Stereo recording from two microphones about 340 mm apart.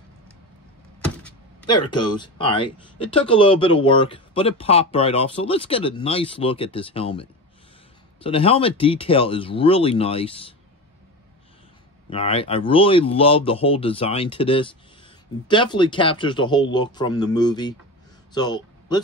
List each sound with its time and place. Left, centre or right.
1.2 s speech: centre
12.1 s speech: centre
18.3 s a sound: centre